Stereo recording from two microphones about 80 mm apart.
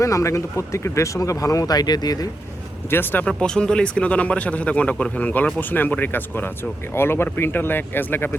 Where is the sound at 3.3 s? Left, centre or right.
Centre.